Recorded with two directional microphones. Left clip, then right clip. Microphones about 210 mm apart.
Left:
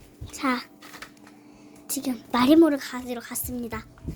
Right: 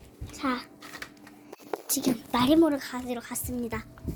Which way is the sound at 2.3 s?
35° left (ahead or behind).